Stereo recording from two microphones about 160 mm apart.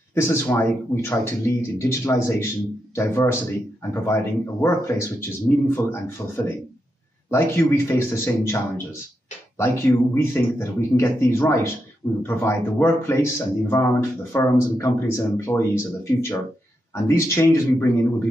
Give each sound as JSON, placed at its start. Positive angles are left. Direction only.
{"t": 0.1, "sound": "speech", "side_deg": 15}
{"t": 9.6, "sound": "speech", "side_deg": 15}